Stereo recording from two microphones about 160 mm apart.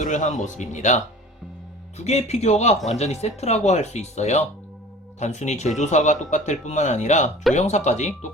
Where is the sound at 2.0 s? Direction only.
45° left (ahead or behind).